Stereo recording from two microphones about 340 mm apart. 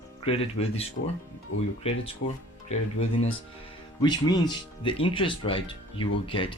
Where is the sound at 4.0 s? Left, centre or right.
Centre.